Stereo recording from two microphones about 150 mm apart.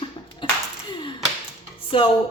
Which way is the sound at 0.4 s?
30° left (ahead or behind).